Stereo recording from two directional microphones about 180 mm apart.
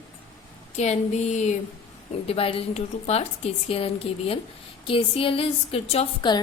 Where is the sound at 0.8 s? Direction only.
40° left (ahead or behind).